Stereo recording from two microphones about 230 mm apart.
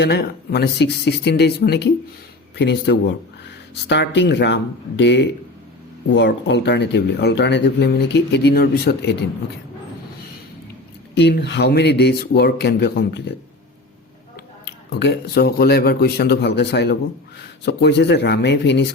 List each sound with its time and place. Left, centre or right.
0.0 s speech: left
11.1 s speech: left
14.8 s speech: left